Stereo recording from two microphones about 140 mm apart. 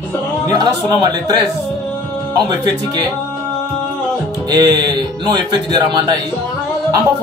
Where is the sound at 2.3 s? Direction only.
30° right (ahead or behind).